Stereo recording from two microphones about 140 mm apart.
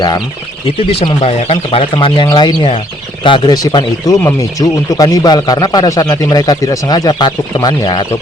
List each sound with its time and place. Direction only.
0.9 s speech: 45° left (ahead or behind)